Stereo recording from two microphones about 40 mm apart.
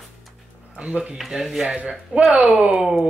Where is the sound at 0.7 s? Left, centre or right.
Right.